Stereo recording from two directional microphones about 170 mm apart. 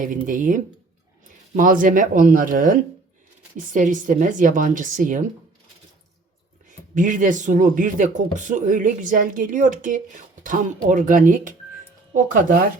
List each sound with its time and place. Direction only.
0.3 s speech: 50° right (ahead or behind)
6.7 s speech: 50° right (ahead or behind)